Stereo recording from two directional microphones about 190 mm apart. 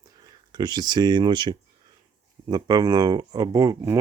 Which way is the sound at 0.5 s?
20° right (ahead or behind).